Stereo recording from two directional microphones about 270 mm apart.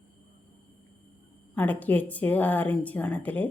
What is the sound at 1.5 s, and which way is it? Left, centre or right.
Speech, centre.